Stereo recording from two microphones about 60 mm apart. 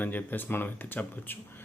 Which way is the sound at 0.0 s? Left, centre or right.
Left.